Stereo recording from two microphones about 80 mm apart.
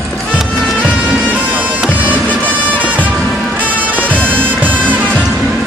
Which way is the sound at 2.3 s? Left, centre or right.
Centre.